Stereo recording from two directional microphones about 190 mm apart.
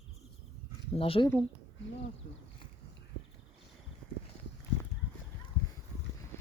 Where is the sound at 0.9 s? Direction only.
30° left (ahead or behind).